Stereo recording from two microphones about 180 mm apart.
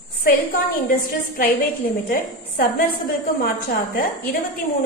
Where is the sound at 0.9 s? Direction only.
50° left (ahead or behind).